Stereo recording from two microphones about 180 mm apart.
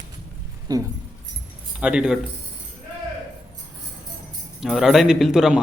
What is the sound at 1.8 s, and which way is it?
Speech, 5° right (ahead or behind).